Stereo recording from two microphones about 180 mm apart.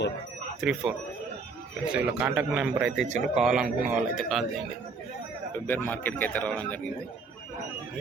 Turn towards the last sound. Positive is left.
turn(degrees=5)  # may be behind; listen again after turning